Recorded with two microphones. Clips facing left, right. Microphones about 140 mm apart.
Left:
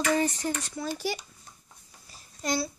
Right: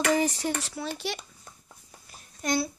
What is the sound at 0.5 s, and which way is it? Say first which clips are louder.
Speech: right 1 dB; 85° right.